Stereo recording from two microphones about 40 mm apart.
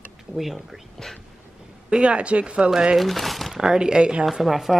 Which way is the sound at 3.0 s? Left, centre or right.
Centre.